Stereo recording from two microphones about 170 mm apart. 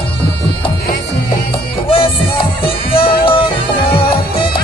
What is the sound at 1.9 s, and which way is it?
Music, 35° left (ahead or behind).